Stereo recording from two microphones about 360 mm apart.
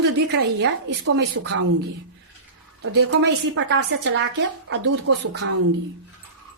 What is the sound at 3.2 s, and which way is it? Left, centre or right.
A woman's voice, right.